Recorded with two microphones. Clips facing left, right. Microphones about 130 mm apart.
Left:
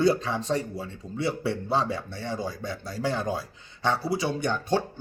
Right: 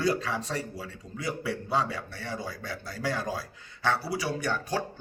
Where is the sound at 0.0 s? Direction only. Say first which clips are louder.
Left 5 dB; 25° left (ahead or behind).